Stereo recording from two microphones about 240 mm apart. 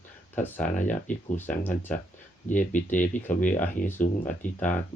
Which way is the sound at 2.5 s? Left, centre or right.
Left.